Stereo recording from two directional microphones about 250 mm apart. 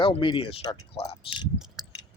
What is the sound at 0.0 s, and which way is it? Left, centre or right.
Speech, left.